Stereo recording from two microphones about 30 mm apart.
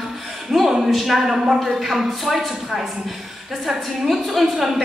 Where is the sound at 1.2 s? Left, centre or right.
Centre.